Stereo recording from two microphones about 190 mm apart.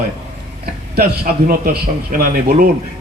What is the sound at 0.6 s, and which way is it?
A man's voice, 55° right (ahead or behind).